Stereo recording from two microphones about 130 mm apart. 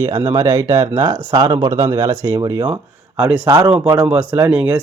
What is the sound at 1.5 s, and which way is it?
Speech, 50° right (ahead or behind).